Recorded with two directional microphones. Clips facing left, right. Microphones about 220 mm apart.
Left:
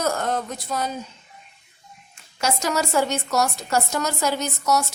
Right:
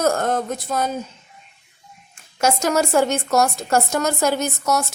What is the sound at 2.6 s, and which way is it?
A woman's voice, 50° right (ahead or behind).